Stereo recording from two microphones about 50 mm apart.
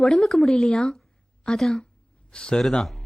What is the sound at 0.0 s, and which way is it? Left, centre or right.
Speech, centre.